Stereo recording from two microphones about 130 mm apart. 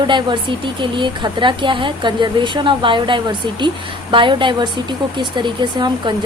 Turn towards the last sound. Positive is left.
turn(degrees=-35)  # may be behind; listen again after turning